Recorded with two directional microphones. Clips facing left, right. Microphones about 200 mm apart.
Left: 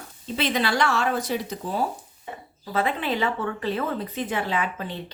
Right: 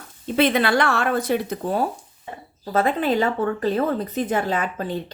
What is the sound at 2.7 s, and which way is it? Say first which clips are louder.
Speech: right 5 dB; 45° right (ahead or behind).